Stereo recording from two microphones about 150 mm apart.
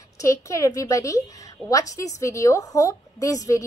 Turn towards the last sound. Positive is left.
turn(degrees=20)  # may be behind; listen again after turning